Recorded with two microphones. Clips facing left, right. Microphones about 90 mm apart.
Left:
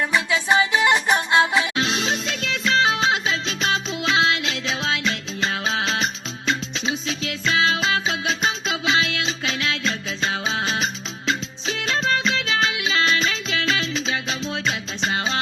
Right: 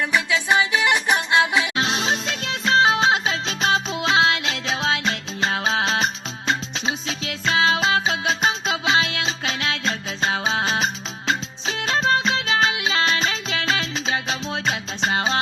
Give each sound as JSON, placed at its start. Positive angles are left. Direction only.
{"t": 0.1, "sound": "music", "side_deg": 20}
{"t": 1.7, "sound": "music", "side_deg": -30}